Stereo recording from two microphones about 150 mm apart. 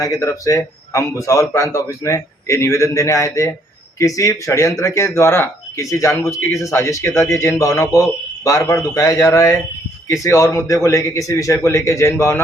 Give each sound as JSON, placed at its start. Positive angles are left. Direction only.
{"t": 0.0, "sound": "speech", "side_deg": 20}